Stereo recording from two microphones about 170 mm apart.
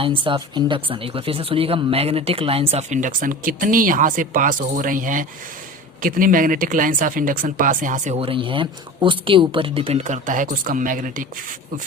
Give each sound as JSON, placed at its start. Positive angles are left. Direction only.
{"t": 0.0, "sound": "speech", "side_deg": -30}
{"t": 8.2, "sound": "speech", "side_deg": -30}